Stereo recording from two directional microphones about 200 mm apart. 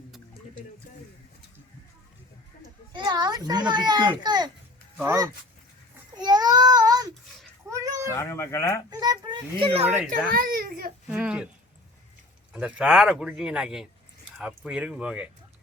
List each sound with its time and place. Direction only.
2.9 s a child's voice: 20° right (ahead or behind)
6.1 s a sound: 20° right (ahead or behind)
8.1 s speech: 15° left (ahead or behind)
8.9 s a child's voice: 20° right (ahead or behind)
9.8 s speech: 10° right (ahead or behind)
10.3 s a child's voice: 45° right (ahead or behind)
11.1 s speech: 5° right (ahead or behind)
12.5 s speech: 5° right (ahead or behind)